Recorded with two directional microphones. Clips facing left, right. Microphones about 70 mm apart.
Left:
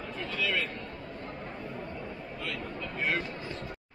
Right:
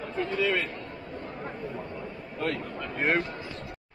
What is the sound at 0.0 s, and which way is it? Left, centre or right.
Speech, right.